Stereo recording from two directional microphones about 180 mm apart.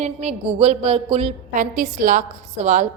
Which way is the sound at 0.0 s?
40° right (ahead or behind).